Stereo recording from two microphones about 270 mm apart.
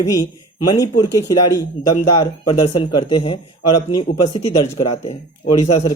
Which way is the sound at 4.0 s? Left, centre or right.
Centre.